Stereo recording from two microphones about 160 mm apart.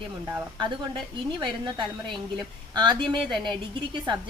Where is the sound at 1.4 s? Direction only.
30° right (ahead or behind).